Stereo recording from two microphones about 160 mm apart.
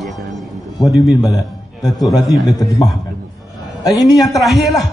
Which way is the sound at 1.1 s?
20° left (ahead or behind).